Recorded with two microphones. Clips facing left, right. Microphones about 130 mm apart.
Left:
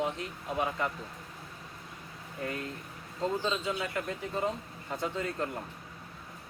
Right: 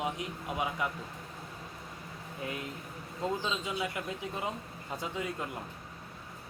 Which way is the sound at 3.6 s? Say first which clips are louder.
Left 2 dB; 15° right (ahead or behind).